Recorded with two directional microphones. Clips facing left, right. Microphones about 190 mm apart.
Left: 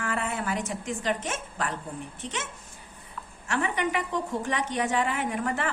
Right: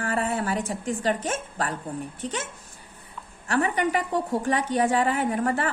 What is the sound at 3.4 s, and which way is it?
A woman's voice, 35° right (ahead or behind).